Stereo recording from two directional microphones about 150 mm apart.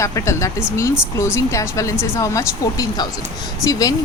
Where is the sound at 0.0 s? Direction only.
20° left (ahead or behind).